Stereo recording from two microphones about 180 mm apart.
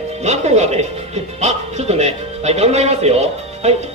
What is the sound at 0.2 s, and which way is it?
Speech, 40° right (ahead or behind).